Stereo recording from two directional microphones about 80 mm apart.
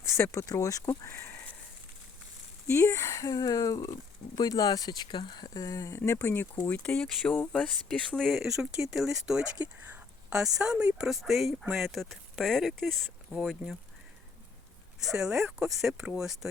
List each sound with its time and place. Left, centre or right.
0.2 s speech: left
1.0 s a sound: left
2.6 s speech: left
5.9 s speech: left
6.7 s speech: left
6.9 s speech: centre
15.0 s speech: centre